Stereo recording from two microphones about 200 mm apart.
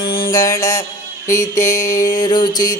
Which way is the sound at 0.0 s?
50° left (ahead or behind).